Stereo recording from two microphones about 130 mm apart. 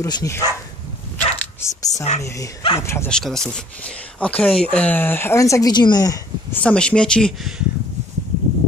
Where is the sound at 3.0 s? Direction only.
5° left (ahead or behind); by 6.2 s 30° left (ahead or behind).